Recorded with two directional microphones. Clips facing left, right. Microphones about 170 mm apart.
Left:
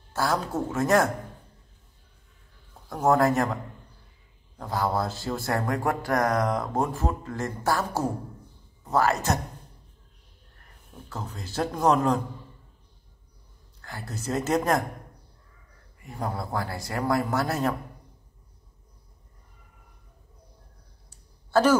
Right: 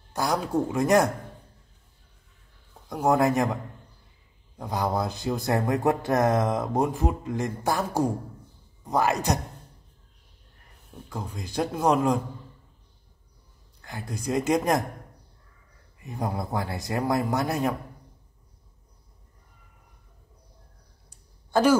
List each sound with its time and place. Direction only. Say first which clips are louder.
0.1 s speech: right 1 dB; 15° right (ahead or behind)
2.9 s speech: even; 15° right (ahead or behind)
4.6 s speech: even; 15° right (ahead or behind)
11.1 s speech: right 2 dB; 15° right (ahead or behind)
13.7 s speech: right 2 dB; 15° right (ahead or behind)
16.0 s a man's voice: right 2 dB; 20° right (ahead or behind)
21.1 s a sound: left 2 dB; 10° right (ahead or behind)